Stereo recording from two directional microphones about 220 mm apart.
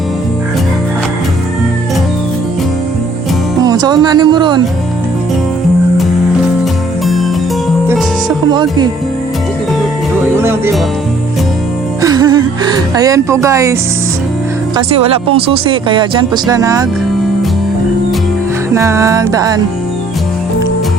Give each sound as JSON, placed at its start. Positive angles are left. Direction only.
{"t": 3.6, "sound": "speech", "side_deg": -20}
{"t": 7.0, "sound": "music", "side_deg": 0}
{"t": 8.4, "sound": "speech", "side_deg": -20}
{"t": 12.0, "sound": "music", "side_deg": -20}
{"t": 14.8, "sound": "speech", "side_deg": -25}
{"t": 18.7, "sound": "music", "side_deg": -10}